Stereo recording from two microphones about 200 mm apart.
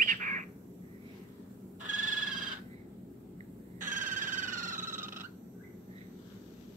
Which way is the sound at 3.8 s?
40° right (ahead or behind).